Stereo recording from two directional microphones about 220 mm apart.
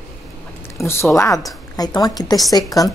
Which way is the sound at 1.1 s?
15° left (ahead or behind).